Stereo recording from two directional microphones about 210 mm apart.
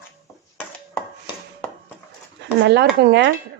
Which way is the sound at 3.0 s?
55° right (ahead or behind).